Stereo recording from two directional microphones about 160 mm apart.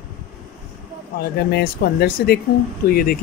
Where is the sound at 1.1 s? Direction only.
75° left (ahead or behind).